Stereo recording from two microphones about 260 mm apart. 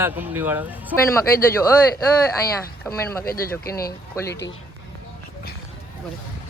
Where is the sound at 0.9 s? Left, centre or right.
Right.